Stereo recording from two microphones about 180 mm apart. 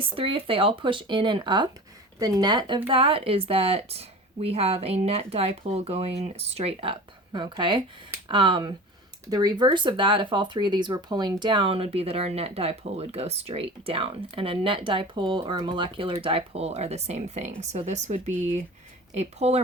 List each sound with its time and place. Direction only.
0.0 s speech: 30° right (ahead or behind)